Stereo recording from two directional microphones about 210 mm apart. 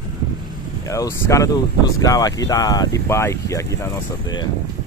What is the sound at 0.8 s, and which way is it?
Speech, 15° left (ahead or behind).